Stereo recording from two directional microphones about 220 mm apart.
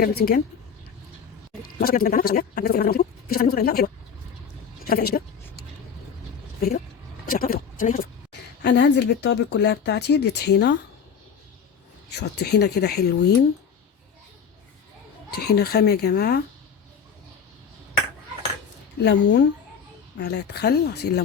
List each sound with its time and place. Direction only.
0.2 s speech: 45° left (ahead or behind)
1.8 s speech: 40° left (ahead or behind)
6.6 s speech: 45° left (ahead or behind)
8.3 s speech: 50° left (ahead or behind)
12.1 s speech: 50° left (ahead or behind)
15.4 s speech: 45° left (ahead or behind)
19.0 s speech: 50° left (ahead or behind)